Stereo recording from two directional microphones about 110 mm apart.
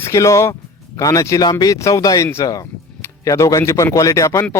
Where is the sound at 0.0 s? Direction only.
30° left (ahead or behind).